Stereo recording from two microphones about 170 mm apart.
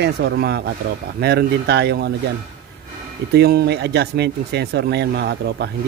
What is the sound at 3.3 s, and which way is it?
Speech, 70° right (ahead or behind).